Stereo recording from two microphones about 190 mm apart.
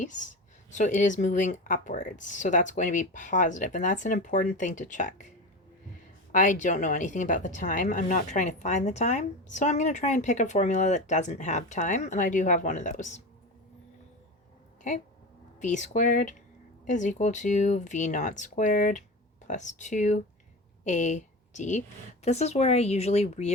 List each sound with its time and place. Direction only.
0.0 s a woman's voice: 40° left (ahead or behind)
6.3 s a woman's voice: 40° left (ahead or behind)
15.6 s a woman's voice: 40° left (ahead or behind)